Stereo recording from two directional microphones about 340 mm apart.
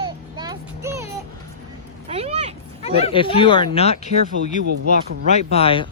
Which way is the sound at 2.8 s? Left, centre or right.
Centre.